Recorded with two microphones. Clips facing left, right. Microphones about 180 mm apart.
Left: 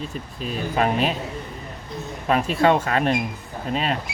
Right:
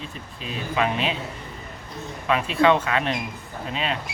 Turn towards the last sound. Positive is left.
turn(degrees=45)  # may be behind; listen again after turning